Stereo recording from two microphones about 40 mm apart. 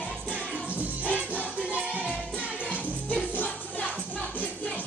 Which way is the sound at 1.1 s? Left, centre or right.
Right.